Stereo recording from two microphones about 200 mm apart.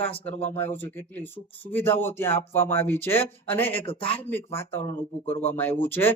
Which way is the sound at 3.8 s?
25° left (ahead or behind).